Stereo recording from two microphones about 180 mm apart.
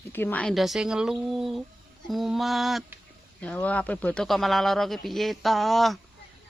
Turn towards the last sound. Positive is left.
turn(degrees=0)  # may be behind; listen again after turning